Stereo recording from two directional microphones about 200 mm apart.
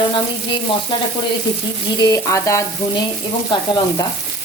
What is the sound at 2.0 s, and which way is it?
Frying, 15° left (ahead or behind).